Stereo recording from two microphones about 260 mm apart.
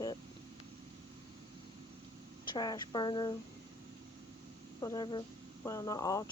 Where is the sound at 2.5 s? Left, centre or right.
Centre.